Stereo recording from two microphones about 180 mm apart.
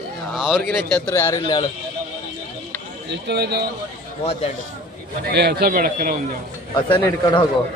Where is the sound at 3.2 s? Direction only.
65° right (ahead or behind).